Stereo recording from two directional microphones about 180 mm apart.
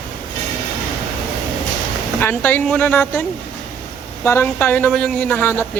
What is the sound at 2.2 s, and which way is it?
A woman's voice, 10° left (ahead or behind).